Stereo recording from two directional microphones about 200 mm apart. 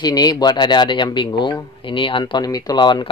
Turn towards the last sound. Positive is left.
turn(degrees=20)  # may be behind; listen again after turning